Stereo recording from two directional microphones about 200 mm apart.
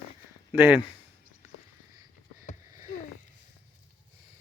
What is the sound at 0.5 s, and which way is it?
Speech, 10° right (ahead or behind).